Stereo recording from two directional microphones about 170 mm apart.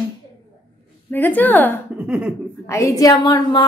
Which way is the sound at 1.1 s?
10° left (ahead or behind).